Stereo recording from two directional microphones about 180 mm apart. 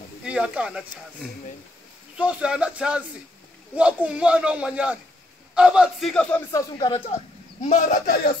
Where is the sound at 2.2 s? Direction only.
5° right (ahead or behind); by 6.6 s 10° left (ahead or behind).